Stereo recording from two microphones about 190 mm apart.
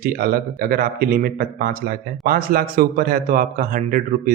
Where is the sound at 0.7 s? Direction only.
50° right (ahead or behind).